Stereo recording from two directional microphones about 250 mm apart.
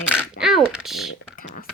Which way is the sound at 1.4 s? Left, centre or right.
Left.